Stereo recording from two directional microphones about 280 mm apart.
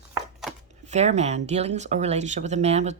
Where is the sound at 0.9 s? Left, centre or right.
Right.